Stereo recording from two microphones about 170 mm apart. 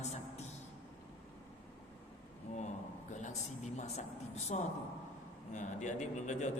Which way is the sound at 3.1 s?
45° left (ahead or behind).